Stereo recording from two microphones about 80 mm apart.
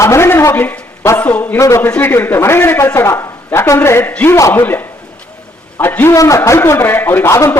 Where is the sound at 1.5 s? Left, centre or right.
Left.